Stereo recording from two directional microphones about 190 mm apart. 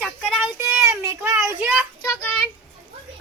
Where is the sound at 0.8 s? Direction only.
15° right (ahead or behind).